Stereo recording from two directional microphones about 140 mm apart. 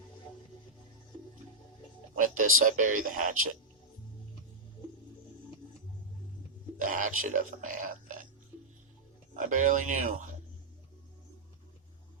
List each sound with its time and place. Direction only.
2.1 s speech: 70° right (ahead or behind)
6.7 s speech: 75° right (ahead or behind)
9.3 s speech: 70° right (ahead or behind)